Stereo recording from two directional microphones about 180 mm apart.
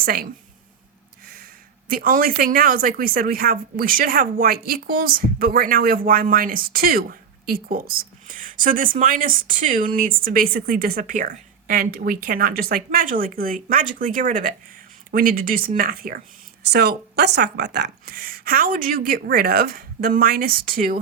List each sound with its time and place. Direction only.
0.0 s speech: 55° right (ahead or behind)
1.9 s a woman's voice: 50° right (ahead or behind)
16.6 s speech: 65° right (ahead or behind); by 21.0 s 50° right (ahead or behind)